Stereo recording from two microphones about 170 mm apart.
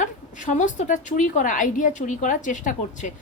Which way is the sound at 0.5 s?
45° left (ahead or behind).